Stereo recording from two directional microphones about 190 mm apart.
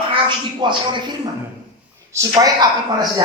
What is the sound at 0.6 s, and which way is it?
A man's voice, 25° right (ahead or behind).